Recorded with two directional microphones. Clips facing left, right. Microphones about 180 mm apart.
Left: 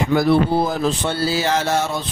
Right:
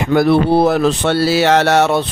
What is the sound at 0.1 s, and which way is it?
Speech, 65° right (ahead or behind).